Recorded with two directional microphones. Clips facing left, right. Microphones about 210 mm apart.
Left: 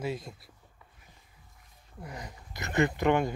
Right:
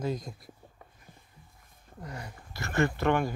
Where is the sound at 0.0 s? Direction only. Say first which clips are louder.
Right 2 dB; 5° left (ahead or behind).